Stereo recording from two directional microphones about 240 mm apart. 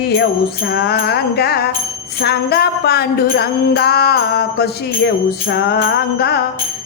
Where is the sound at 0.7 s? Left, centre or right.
Left.